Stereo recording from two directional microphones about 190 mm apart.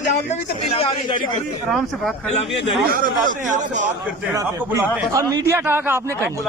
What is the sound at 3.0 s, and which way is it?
Speech, 45° right (ahead or behind).